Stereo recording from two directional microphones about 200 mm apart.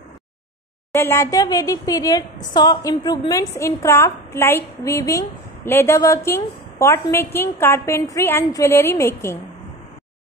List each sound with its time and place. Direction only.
0.9 s a woman's voice: 15° left (ahead or behind)